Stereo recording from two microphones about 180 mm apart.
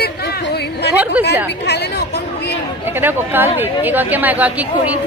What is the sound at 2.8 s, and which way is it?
Speech, 10° right (ahead or behind).